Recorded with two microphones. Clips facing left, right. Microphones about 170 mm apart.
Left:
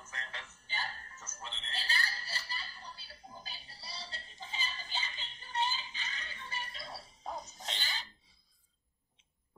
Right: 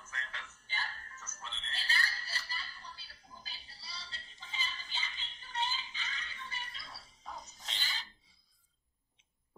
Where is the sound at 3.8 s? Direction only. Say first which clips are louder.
Left 4 dB; 50° left (ahead or behind).